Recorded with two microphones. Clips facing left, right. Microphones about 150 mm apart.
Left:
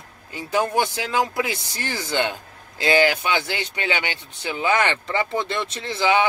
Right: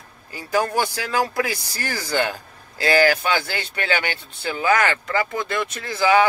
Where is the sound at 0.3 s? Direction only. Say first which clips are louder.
Even; 20° left (ahead or behind).